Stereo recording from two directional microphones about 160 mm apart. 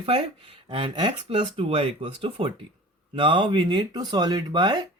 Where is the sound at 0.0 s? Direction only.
35° right (ahead or behind).